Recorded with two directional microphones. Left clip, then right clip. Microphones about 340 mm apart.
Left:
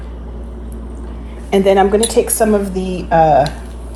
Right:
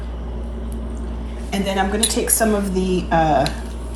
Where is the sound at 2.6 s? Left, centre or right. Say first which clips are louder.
Even; centre.